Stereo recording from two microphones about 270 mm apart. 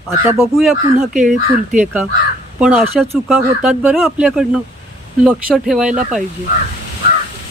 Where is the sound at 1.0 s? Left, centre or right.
Right.